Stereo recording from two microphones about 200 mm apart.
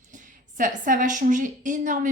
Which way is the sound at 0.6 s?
40° right (ahead or behind).